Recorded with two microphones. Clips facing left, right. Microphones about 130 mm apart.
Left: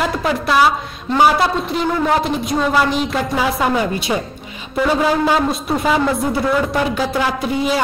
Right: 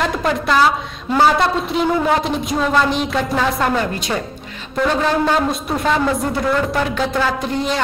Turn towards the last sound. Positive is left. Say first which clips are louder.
# left 2 dB
turn(degrees=5)  # may be behind; listen again after turning